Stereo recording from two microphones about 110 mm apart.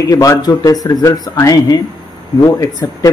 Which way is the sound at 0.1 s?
35° left (ahead or behind).